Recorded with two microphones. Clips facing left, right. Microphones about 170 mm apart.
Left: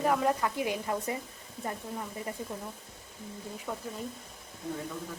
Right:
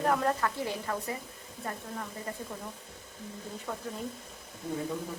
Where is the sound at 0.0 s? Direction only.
5° left (ahead or behind).